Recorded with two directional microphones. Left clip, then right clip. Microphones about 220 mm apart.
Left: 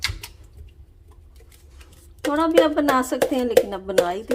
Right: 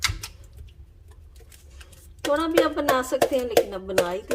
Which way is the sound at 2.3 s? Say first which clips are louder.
Left 4 dB; 40° left (ahead or behind).